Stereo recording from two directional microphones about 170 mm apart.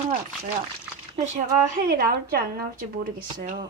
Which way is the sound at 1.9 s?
60° right (ahead or behind).